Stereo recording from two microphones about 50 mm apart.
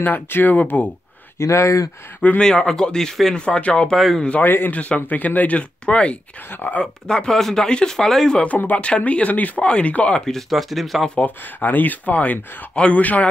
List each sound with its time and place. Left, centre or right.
0.0 s speech: left
1.4 s speech: left
2.4 s speech: centre
3.9 s speech: centre
4.4 s speech: left
4.7 s speech: left
6.5 s speech: left
6.8 s speech: centre
8.7 s speech: left
10.2 s speech: centre
11.2 s speech: left